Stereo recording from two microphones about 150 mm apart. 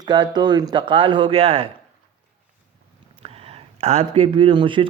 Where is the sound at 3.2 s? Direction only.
40° right (ahead or behind).